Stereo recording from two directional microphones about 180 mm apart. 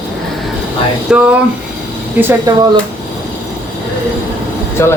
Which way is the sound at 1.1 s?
5° right (ahead or behind).